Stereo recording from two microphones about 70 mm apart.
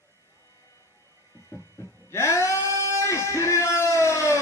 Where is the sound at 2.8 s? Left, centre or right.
Left.